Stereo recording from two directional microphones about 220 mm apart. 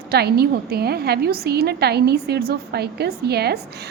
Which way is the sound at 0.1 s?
45° right (ahead or behind).